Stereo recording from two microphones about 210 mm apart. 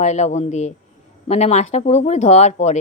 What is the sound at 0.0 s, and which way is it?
A woman's voice, 35° left (ahead or behind).